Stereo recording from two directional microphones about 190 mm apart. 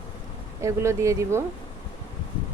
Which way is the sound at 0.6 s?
15° right (ahead or behind).